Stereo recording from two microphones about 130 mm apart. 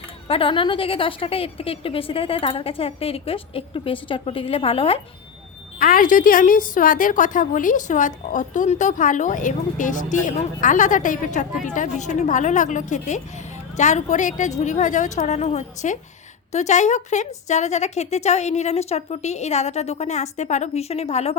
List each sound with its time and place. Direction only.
0.3 s a woman's voice: 45° left (ahead or behind)
5.8 s a woman's voice: 90° left; by 21.3 s 55° left (ahead or behind)